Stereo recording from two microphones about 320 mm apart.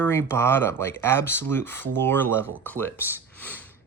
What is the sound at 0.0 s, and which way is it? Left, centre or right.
Speech, centre.